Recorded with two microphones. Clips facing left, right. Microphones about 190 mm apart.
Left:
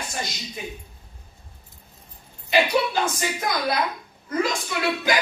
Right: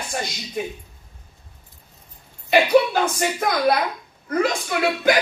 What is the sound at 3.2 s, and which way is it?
A woman's voice, 55° right (ahead or behind).